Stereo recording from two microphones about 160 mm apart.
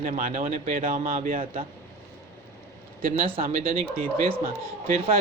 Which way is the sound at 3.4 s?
65° right (ahead or behind).